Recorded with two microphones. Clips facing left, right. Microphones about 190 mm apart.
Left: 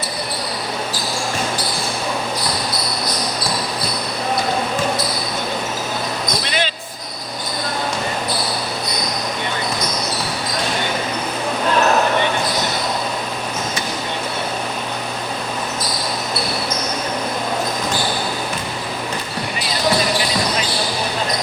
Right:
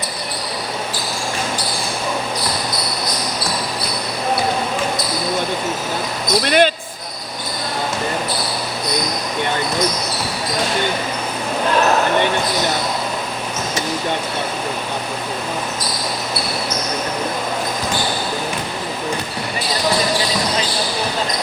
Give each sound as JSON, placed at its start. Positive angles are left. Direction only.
{"t": 6.4, "sound": "basketball bounce", "side_deg": -55}